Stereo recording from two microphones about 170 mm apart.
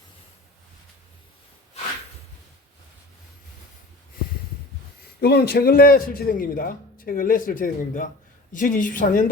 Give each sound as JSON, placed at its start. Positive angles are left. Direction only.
{"t": 5.2, "sound": "a man's voice", "side_deg": 70}